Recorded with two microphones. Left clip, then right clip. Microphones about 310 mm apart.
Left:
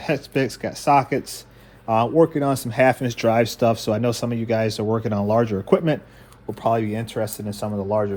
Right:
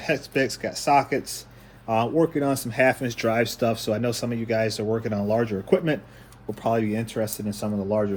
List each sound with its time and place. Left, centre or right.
0.0 s speech: centre